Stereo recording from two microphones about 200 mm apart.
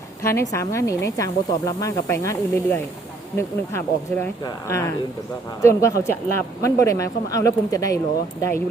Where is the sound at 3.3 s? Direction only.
10° left (ahead or behind).